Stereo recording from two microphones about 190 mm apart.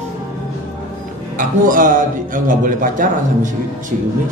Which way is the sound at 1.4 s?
45° right (ahead or behind).